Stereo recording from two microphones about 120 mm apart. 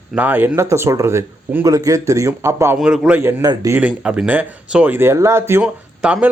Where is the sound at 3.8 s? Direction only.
5° right (ahead or behind).